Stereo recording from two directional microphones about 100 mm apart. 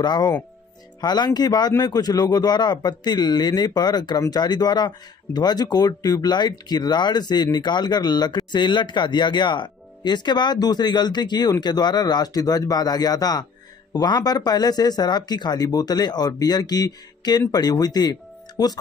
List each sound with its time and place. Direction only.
0.0 s speech: 45° left (ahead or behind)